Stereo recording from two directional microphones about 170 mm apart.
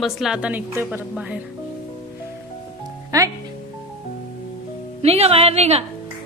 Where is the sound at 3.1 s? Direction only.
20° right (ahead or behind).